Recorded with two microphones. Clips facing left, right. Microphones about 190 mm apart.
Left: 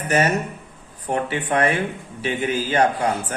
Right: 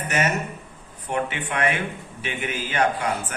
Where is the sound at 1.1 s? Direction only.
35° left (ahead or behind).